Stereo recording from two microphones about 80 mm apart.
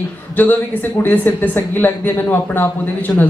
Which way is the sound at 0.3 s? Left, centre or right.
Left.